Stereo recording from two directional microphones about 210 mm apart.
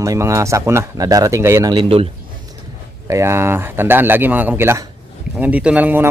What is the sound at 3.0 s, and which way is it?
Speech, 15° right (ahead or behind).